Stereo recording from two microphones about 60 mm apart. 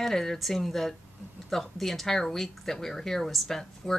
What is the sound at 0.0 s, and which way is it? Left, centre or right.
A man's voice, centre.